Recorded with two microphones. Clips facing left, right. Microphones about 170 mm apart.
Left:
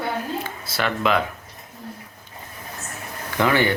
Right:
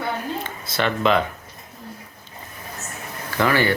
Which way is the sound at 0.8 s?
5° left (ahead or behind).